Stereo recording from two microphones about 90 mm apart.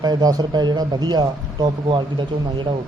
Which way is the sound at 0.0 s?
50° right (ahead or behind).